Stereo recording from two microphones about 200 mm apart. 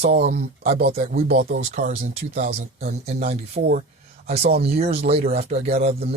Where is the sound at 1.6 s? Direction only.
45° right (ahead or behind).